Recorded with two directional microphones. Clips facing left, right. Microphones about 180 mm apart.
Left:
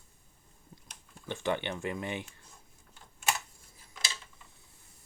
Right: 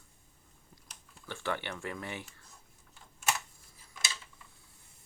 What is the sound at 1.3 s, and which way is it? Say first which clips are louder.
Speech: left 4 dB; 20° left (ahead or behind).